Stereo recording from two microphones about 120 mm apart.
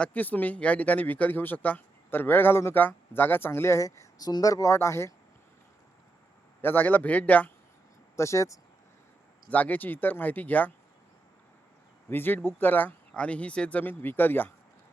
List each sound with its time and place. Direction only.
0.0 s speech: 15° left (ahead or behind)
6.6 s speech: 15° left (ahead or behind)
8.1 s speech: 25° left (ahead or behind)
9.5 s speech: 15° left (ahead or behind)
12.1 s speech: 15° left (ahead or behind)